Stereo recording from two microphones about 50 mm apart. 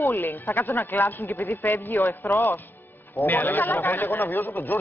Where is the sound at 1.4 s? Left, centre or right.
Left.